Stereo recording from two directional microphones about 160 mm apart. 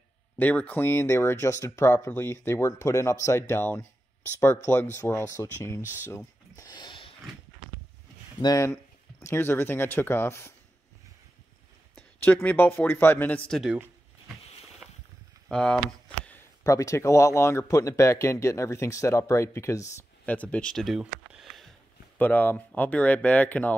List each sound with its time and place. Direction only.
0.4 s speech: 10° left (ahead or behind)
5.8 s speech: 10° right (ahead or behind)
6.0 s a sound: 20° left (ahead or behind)
8.4 s speech: 20° left (ahead or behind)
11.9 s speech: 15° left (ahead or behind)
13.5 s speech: centre (ahead or behind)
14.8 s a sound: 5° right (ahead or behind)
15.4 s speech: 5° left (ahead or behind)
16.6 s speech: 20° left (ahead or behind)
20.3 s speech: 5° left (ahead or behind)
22.2 s speech: 10° left (ahead or behind)